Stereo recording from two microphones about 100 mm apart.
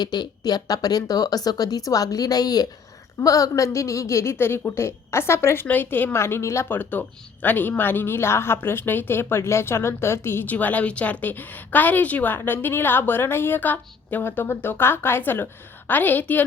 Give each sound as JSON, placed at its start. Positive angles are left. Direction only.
{"t": 0.0, "sound": "a woman's voice", "side_deg": 45}